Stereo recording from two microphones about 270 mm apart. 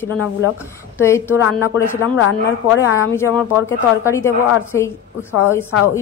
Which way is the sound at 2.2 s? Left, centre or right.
Left.